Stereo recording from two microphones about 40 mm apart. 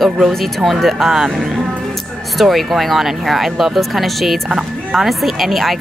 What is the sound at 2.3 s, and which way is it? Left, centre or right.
Speech, centre.